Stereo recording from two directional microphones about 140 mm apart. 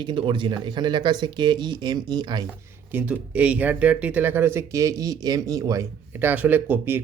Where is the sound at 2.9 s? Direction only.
10° right (ahead or behind).